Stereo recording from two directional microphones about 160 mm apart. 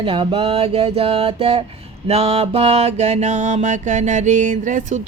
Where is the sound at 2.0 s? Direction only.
40° right (ahead or behind).